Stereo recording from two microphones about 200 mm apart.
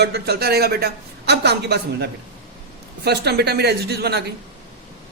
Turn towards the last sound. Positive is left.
turn(degrees=-55)  # may be behind; listen again after turning